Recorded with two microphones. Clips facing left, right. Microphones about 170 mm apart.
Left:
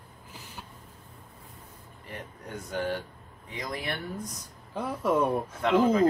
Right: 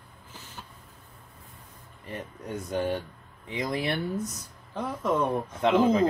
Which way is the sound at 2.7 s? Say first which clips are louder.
Right 2 dB; 20° right (ahead or behind).